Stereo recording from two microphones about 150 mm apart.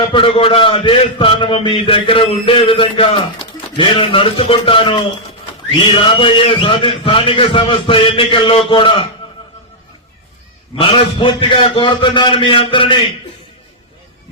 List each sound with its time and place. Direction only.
0.0 s a man's voice: 35° left (ahead or behind)
10.8 s a man's voice: 35° left (ahead or behind)